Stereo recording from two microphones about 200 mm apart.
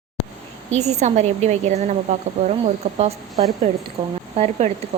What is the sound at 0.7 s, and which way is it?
A woman's voice, 35° right (ahead or behind).